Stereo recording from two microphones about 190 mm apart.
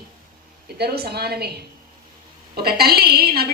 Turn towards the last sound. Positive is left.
turn(degrees=-55)  # may be behind; listen again after turning